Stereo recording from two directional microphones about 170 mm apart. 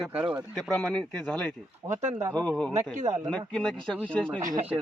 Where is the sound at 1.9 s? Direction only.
45° right (ahead or behind).